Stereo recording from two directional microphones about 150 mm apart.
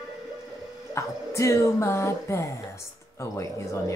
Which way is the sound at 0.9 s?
20° left (ahead or behind).